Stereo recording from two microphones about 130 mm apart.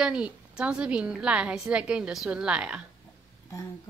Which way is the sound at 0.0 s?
5° right (ahead or behind).